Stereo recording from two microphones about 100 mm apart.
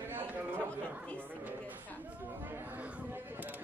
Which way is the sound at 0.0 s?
20° right (ahead or behind).